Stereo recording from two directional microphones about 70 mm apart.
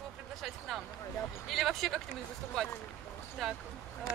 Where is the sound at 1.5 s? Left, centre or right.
Centre.